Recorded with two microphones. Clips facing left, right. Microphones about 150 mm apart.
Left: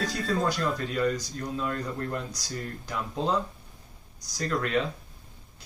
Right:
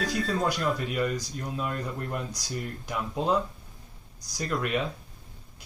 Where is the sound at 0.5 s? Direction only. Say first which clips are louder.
Even; 10° right (ahead or behind).